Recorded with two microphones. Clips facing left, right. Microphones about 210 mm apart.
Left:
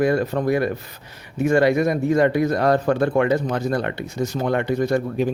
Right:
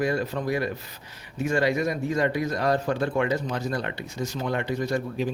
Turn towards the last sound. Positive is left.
turn(degrees=55)  # may be behind; listen again after turning